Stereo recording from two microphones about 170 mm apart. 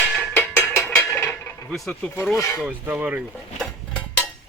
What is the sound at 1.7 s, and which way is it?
Speech, 5° left (ahead or behind).